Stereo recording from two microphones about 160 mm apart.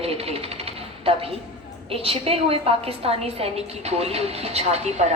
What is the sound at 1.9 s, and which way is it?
A woman's voice, 35° right (ahead or behind).